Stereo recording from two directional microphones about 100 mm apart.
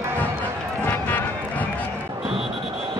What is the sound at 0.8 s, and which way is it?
Music, 20° left (ahead or behind).